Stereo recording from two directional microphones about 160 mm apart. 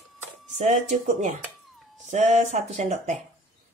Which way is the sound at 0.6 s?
45° right (ahead or behind).